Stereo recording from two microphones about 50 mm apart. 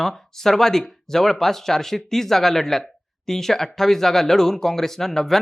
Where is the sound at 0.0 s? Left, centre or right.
Centre.